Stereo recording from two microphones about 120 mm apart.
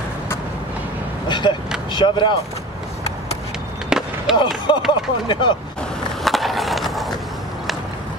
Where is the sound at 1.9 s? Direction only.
40° left (ahead or behind).